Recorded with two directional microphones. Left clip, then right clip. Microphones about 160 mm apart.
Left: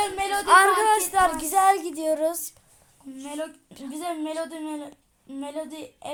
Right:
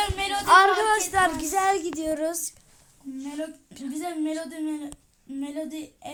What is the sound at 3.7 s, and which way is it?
Speech, centre (ahead or behind).